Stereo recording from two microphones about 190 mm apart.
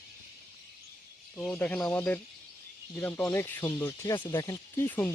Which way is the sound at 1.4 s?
10° left (ahead or behind).